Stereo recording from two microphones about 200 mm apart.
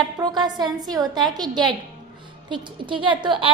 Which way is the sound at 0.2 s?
20° right (ahead or behind).